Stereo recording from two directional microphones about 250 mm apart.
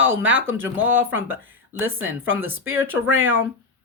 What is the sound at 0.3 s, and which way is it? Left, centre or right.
Speech, right.